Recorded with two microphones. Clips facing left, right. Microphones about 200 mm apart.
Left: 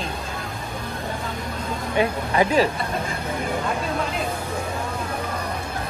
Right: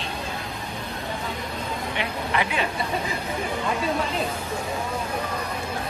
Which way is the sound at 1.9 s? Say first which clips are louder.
Left 7 dB; 40° left (ahead or behind).